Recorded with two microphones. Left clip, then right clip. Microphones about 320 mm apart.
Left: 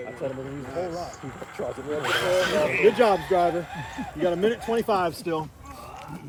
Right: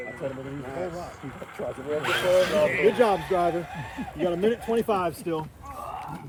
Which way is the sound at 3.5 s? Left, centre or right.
Centre.